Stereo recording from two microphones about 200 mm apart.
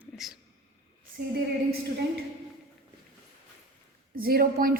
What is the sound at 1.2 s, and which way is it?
Speech, 45° right (ahead or behind).